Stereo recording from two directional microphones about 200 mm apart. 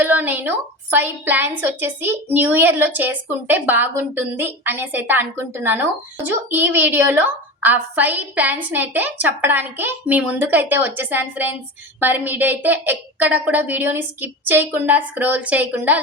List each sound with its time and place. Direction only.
0.0 s a woman's voice: 10° right (ahead or behind)